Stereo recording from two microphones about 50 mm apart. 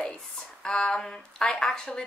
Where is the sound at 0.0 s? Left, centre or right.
Centre.